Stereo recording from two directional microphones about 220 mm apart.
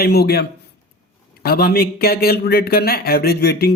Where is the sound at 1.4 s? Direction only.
45° left (ahead or behind).